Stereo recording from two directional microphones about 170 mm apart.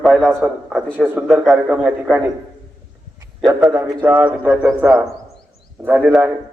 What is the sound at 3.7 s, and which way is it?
A man's voice, 15° right (ahead or behind).